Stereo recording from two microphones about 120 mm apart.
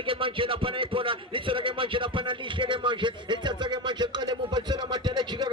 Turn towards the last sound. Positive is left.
turn(degrees=-35)  # may be behind; listen again after turning